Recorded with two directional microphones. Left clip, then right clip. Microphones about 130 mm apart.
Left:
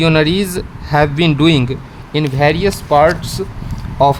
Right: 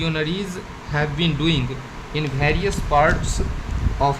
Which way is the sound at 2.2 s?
90° left.